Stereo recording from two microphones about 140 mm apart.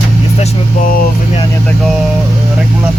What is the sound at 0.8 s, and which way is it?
Speech, 85° left.